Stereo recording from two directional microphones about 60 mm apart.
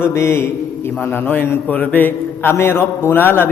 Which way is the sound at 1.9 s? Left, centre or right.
Left.